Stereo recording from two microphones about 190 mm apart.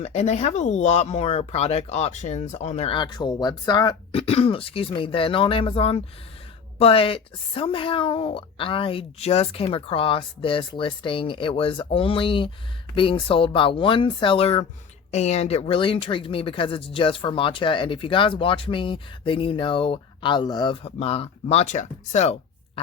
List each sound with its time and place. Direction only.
0.0 s speech: 35° left (ahead or behind)